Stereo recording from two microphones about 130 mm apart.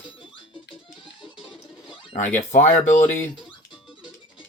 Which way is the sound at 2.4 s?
70° left (ahead or behind).